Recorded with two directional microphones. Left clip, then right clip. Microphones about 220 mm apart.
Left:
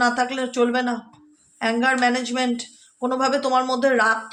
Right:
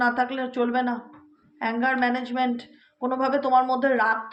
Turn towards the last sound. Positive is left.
turn(degrees=40)  # may be behind; listen again after turning